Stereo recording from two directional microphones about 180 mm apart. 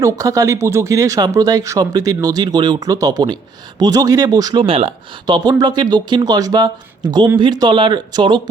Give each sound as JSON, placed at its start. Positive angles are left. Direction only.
{"t": 0.0, "sound": "speech", "side_deg": -20}